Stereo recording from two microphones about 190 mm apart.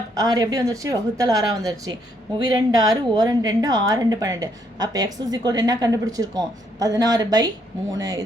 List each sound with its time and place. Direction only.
0.2 s a woman's voice: 20° right (ahead or behind)